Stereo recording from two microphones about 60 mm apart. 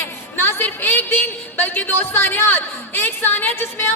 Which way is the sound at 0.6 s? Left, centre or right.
Left.